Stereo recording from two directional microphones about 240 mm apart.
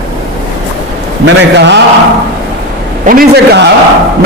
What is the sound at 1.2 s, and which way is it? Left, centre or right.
Speech, right.